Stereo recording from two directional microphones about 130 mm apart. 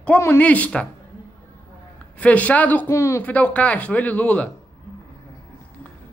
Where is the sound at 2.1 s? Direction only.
10° left (ahead or behind).